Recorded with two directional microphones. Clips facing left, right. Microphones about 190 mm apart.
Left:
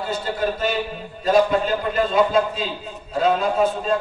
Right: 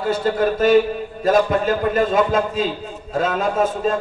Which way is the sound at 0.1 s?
50° right (ahead or behind).